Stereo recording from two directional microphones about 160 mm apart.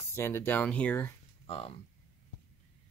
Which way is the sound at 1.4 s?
35° left (ahead or behind).